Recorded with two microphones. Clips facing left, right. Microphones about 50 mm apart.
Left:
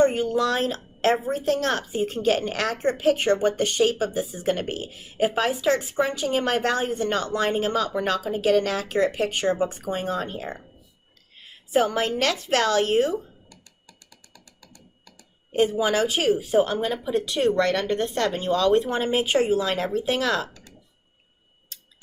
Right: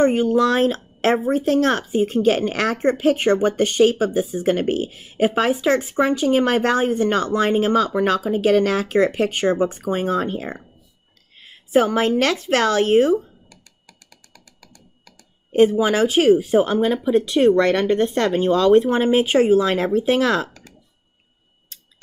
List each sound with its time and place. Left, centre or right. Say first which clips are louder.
0.0 s speech: right 4 dB; right
11.7 s speech: right 5 dB; right
14.3 s computer keyboard: right 2 dB; right
15.5 s speech: right 6 dB; right